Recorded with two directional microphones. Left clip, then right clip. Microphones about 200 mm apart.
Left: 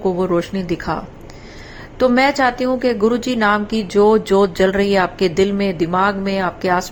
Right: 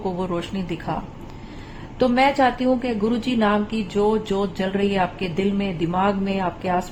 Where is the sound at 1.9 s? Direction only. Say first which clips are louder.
Left 4 dB; 20° left (ahead or behind).